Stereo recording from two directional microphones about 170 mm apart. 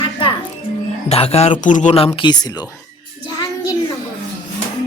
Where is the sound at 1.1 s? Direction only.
35° left (ahead or behind).